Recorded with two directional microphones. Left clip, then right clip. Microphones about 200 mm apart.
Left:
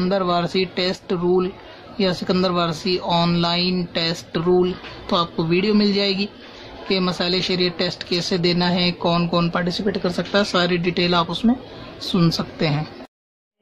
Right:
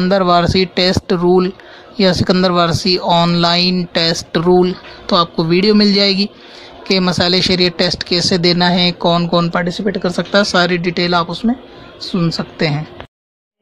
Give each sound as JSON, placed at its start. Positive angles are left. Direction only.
{"t": 0.1, "sound": "speech", "side_deg": -30}